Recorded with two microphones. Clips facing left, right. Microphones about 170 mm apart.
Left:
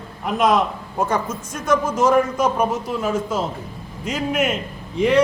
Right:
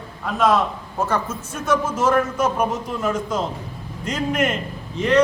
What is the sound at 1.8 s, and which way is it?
A man's voice, 10° left (ahead or behind).